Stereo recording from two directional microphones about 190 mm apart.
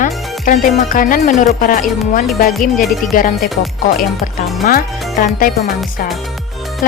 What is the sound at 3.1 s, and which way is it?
Speech, 45° left (ahead or behind).